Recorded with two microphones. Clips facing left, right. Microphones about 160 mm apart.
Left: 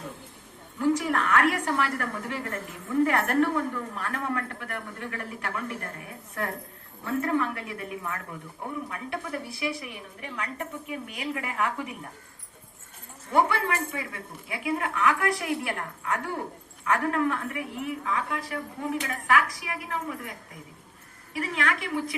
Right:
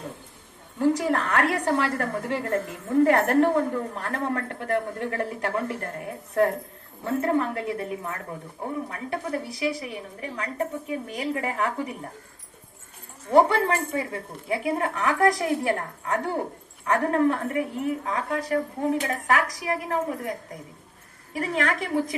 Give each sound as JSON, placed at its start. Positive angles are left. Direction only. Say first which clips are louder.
{"t": 0.8, "sound": "a woman's voice", "louder": "right 2 dB", "side_deg": -35}
{"t": 7.0, "sound": "a woman's voice", "louder": "right 3 dB", "side_deg": -35}
{"t": 13.3, "sound": "a woman's voice", "louder": "right 5 dB", "side_deg": -35}